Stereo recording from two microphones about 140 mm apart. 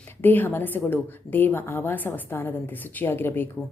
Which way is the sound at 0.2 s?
15° left (ahead or behind).